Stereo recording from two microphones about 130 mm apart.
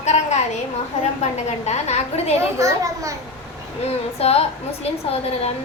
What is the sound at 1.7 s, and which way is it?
Speech, 55° left (ahead or behind).